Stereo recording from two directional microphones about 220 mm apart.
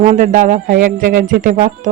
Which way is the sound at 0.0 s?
35° right (ahead or behind).